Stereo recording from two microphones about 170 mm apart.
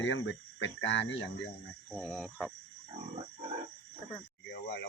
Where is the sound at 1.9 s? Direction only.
Centre (ahead or behind).